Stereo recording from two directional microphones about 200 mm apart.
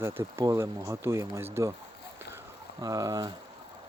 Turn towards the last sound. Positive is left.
turn(degrees=-20)  # may be behind; listen again after turning